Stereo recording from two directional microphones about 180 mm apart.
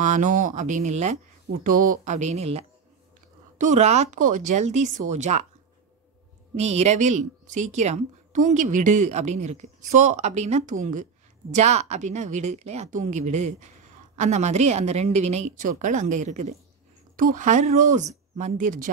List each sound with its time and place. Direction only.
0.0 s speech: 45° right (ahead or behind)
1.6 s speech: 50° right (ahead or behind)
6.5 s speech: 35° right (ahead or behind)